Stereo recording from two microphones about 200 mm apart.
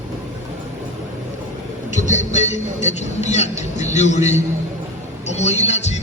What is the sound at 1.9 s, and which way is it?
Speech, 35° left (ahead or behind).